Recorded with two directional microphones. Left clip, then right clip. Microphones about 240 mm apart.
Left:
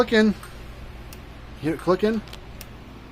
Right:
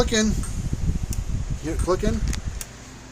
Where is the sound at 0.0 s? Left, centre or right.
Centre.